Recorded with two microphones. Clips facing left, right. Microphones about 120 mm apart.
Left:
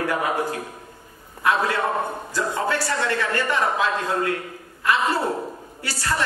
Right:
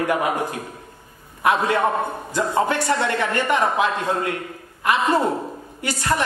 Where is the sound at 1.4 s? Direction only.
20° right (ahead or behind).